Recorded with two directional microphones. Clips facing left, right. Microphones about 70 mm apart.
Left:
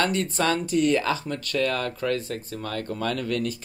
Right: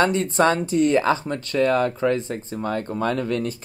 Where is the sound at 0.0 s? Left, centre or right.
Right.